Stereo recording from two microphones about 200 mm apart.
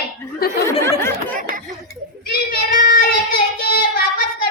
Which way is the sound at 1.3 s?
45° right (ahead or behind).